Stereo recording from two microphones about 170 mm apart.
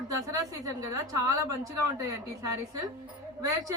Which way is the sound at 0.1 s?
20° right (ahead or behind).